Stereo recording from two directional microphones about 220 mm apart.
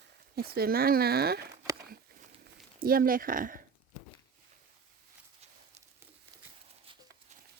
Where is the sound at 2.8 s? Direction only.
40° right (ahead or behind).